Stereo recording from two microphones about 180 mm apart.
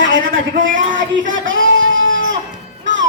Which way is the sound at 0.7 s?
45° right (ahead or behind).